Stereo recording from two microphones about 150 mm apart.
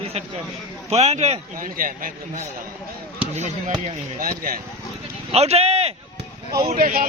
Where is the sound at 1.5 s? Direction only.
65° right (ahead or behind).